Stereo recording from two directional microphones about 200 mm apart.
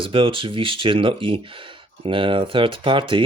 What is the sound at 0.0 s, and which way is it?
Speech, 25° right (ahead or behind).